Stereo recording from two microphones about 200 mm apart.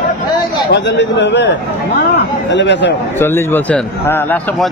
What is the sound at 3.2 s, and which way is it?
A man's voice, 10° left (ahead or behind).